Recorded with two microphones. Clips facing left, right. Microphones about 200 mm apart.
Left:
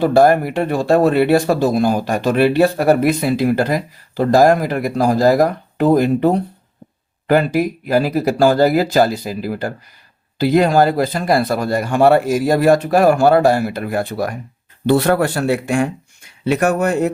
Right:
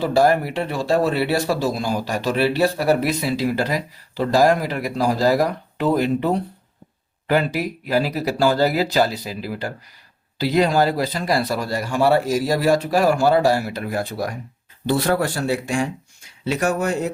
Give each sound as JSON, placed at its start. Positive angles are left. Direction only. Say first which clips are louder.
{"t": 0.0, "sound": "speech", "louder": "left 5 dB", "side_deg": 55}